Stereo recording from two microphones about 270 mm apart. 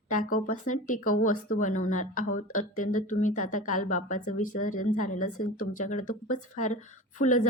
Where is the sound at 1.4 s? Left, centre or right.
Left.